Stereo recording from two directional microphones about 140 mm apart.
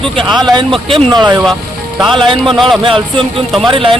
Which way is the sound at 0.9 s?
35° right (ahead or behind).